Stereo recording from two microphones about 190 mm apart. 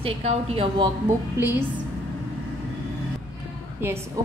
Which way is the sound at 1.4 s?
10° right (ahead or behind).